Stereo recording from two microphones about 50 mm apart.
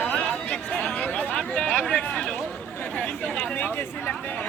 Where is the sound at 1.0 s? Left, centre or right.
Left.